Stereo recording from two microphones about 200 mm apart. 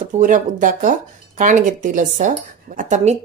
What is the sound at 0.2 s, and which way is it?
Speech, 40° right (ahead or behind).